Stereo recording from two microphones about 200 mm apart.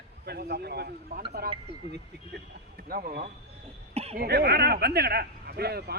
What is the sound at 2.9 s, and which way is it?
Speech, 45° right (ahead or behind).